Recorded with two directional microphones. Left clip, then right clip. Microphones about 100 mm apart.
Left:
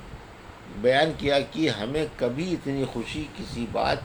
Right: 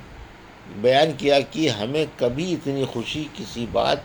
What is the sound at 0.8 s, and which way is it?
A man's voice, 55° right (ahead or behind).